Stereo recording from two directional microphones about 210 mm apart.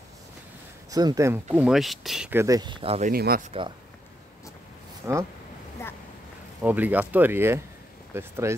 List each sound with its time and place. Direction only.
0.8 s speech: 15° right (ahead or behind)
2.4 s speech: 20° right (ahead or behind)
3.1 s speech: 45° right (ahead or behind)
5.1 s speech: 10° right (ahead or behind)
6.6 s speech: 10° right (ahead or behind)